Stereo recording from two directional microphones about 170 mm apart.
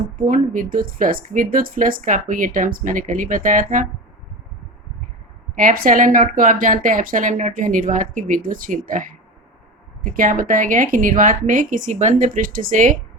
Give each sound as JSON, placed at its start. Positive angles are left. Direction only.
{"t": 0.3, "sound": "speech", "side_deg": -50}
{"t": 5.5, "sound": "speech", "side_deg": -55}